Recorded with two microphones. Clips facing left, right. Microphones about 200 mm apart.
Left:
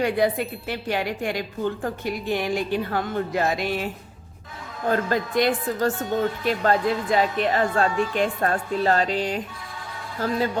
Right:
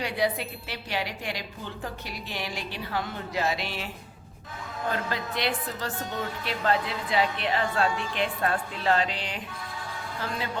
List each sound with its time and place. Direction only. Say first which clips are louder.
0.0 s speech: left 6 dB; 50° left (ahead or behind)
4.9 s speech: left 8 dB; 45° left (ahead or behind)